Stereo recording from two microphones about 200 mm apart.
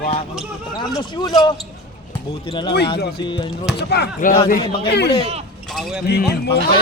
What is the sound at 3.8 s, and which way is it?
Speech, 55° left (ahead or behind).